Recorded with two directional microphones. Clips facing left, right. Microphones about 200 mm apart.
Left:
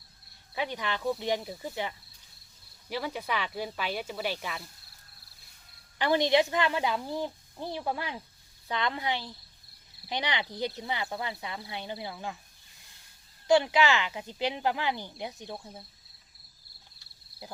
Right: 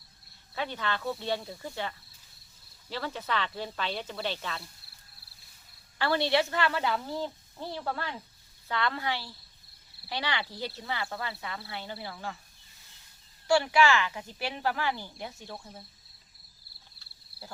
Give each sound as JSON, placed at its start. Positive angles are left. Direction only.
{"t": 0.5, "sound": "speech", "side_deg": 15}
{"t": 6.0, "sound": "speech", "side_deg": 15}
{"t": 13.5, "sound": "speech", "side_deg": 20}